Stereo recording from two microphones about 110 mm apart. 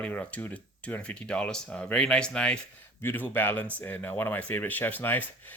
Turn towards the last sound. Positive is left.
turn(degrees=15)  # may be behind; listen again after turning